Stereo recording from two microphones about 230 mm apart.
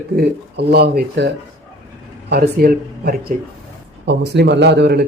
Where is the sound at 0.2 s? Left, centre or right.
Right.